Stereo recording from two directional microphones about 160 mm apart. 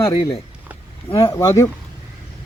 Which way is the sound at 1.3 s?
15° left (ahead or behind).